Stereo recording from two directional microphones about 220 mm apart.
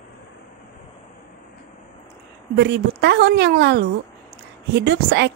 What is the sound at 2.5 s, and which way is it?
Speech, 50° right (ahead or behind).